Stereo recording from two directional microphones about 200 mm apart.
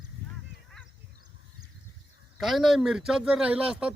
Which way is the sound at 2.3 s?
Centre (ahead or behind).